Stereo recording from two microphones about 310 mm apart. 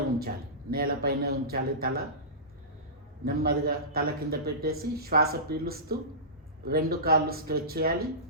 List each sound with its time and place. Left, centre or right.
0.7 s a man's voice: right
3.2 s a man's voice: right